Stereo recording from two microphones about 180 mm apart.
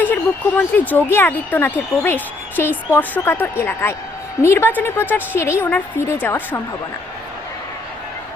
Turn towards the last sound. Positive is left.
turn(degrees=10)  # may be behind; listen again after turning